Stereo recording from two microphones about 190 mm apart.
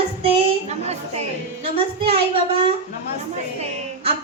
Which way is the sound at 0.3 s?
35° right (ahead or behind).